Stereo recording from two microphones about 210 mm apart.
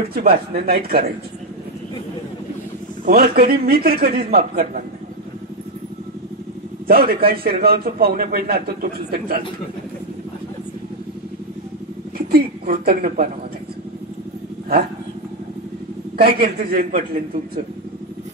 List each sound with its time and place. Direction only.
0.1 s a man's voice: 45° right (ahead or behind)
3.1 s a man's voice: 45° right (ahead or behind)
6.9 s a man's voice: 45° right (ahead or behind)
12.3 s a man's voice: 45° right (ahead or behind)
16.2 s a man's voice: 45° right (ahead or behind)
16.5 s a man's voice: 35° right (ahead or behind)